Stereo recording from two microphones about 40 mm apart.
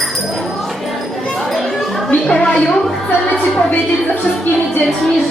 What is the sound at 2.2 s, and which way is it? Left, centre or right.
Speech, left.